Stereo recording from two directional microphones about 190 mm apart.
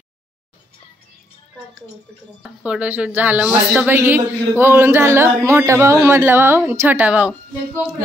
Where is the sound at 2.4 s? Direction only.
5° right (ahead or behind).